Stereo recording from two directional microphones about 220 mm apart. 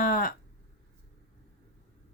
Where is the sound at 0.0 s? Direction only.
40° left (ahead or behind).